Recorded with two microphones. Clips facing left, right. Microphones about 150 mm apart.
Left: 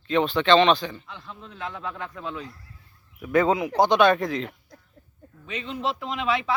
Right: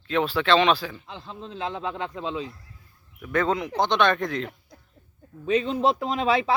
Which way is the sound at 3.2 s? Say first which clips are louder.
Left 3 dB; 10° left (ahead or behind).